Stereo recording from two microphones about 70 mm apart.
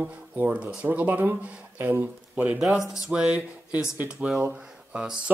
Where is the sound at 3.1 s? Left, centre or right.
Centre.